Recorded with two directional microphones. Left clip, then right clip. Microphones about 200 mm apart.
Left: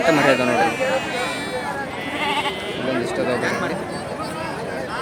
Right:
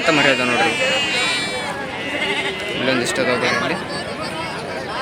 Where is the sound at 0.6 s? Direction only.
55° left (ahead or behind).